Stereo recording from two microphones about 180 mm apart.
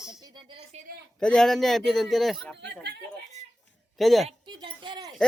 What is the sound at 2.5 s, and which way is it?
Speech, 65° right (ahead or behind).